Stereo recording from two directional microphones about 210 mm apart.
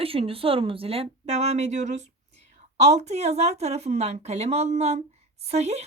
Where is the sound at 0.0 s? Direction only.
25° right (ahead or behind).